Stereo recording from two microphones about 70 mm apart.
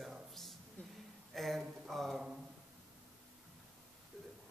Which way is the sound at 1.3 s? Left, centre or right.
Centre.